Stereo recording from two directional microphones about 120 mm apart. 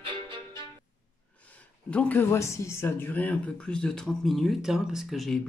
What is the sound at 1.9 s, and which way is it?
Speech, 15° left (ahead or behind).